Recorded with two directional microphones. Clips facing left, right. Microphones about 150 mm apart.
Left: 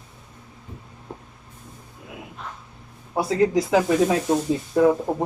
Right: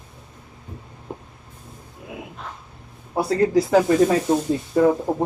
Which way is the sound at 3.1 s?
Centre (ahead or behind).